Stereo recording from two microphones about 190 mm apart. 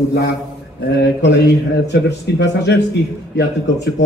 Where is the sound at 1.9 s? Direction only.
65° left (ahead or behind).